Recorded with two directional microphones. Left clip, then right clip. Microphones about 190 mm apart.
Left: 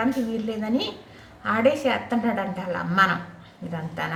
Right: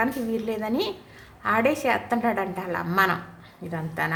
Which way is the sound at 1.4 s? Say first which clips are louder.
Left 1 dB; 25° right (ahead or behind).